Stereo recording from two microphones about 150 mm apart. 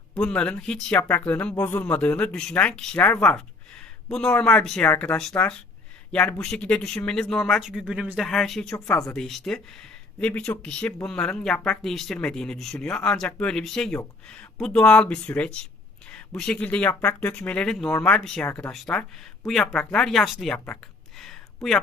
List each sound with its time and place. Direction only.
0.1 s speech: 5° left (ahead or behind)
8.7 s speech: 20° left (ahead or behind)
9.1 s speech: centre (ahead or behind)
21.2 s a sound: centre (ahead or behind)